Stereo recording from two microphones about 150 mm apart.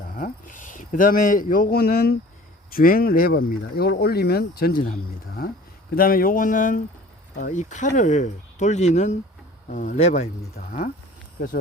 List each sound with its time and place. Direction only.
0.2 s a man's voice: 60° left (ahead or behind); by 2.1 s 90° left
2.6 s speech: 75° left (ahead or behind); by 10.2 s 50° left (ahead or behind)
10.7 s speech: 65° left (ahead or behind)